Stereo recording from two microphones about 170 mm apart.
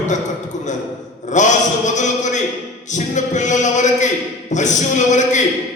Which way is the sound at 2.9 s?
45° left (ahead or behind).